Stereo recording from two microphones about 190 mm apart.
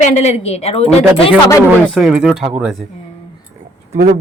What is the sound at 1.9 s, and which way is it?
Speech, 5° right (ahead or behind).